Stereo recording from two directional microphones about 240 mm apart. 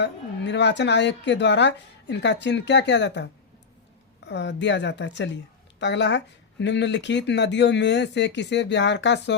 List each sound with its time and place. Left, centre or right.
0.0 s speech: left
4.3 s speech: left